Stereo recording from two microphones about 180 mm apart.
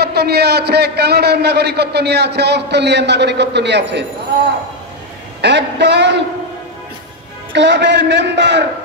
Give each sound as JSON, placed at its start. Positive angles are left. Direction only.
{"t": 0.0, "sound": "a man's voice", "side_deg": -65}
{"t": 5.4, "sound": "a man's voice", "side_deg": -75}
{"t": 7.5, "sound": "a man's voice", "side_deg": -75}